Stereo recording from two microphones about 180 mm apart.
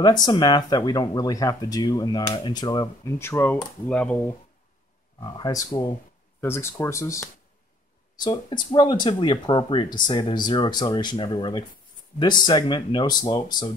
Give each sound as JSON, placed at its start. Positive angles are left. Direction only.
{"t": 0.0, "sound": "speech", "side_deg": 20}
{"t": 5.2, "sound": "speech", "side_deg": 20}